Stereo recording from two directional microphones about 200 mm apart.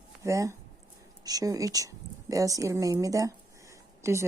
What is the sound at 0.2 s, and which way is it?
Speech, 15° right (ahead or behind).